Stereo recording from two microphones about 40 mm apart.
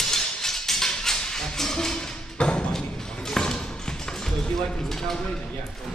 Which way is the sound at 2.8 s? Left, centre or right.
Centre.